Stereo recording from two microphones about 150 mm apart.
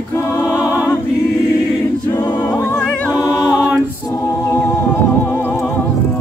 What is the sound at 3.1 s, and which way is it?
A capella, 25° left (ahead or behind).